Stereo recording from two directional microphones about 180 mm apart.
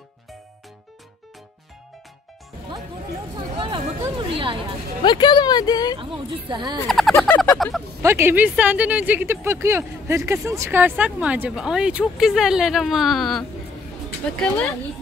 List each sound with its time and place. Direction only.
3.3 s speech: 30° right (ahead or behind)
5.0 s speech: 25° left (ahead or behind)
5.9 s speech: 25° right (ahead or behind)
6.9 s speech: centre (ahead or behind)
8.0 s speech: 15° right (ahead or behind); by 13.5 s centre (ahead or behind)